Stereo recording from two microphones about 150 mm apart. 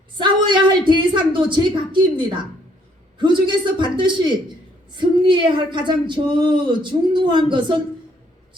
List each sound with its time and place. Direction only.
0.2 s a woman's voice: 30° right (ahead or behind)